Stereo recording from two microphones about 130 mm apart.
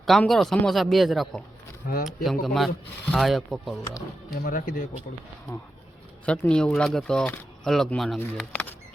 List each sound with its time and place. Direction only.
0.0 s speech: centre (ahead or behind)
4.4 s speech: 90° left
6.2 s speech: 10° left (ahead or behind)